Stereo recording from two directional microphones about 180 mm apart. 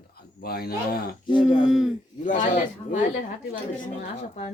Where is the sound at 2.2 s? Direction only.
45° left (ahead or behind).